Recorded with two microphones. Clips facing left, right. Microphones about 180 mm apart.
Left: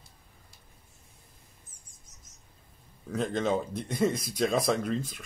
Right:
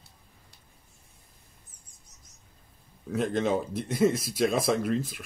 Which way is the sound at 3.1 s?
5° right (ahead or behind).